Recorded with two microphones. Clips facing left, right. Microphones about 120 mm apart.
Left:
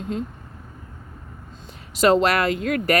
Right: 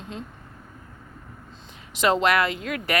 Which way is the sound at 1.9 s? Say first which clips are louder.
Left 3 dB; 40° left (ahead or behind).